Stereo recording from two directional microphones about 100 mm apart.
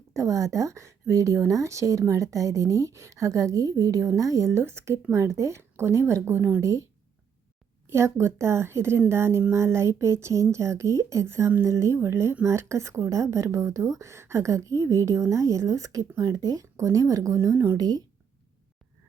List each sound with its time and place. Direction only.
0.1 s a woman's voice: 30° right (ahead or behind)
7.9 s a woman's voice: 25° right (ahead or behind)